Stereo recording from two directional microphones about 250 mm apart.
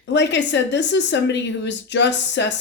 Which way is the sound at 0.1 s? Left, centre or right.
Left.